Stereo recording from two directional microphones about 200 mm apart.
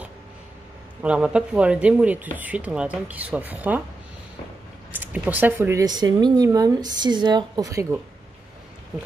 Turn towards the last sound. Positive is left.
turn(degrees=-15)  # may be behind; listen again after turning